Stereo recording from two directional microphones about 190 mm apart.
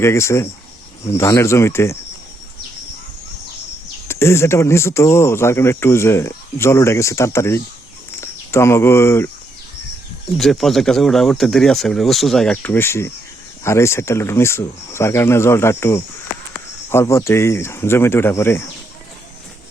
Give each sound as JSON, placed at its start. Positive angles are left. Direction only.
{"t": 0.0, "sound": "speech", "side_deg": 15}
{"t": 4.1, "sound": "speech", "side_deg": 15}
{"t": 10.3, "sound": "speech", "side_deg": 0}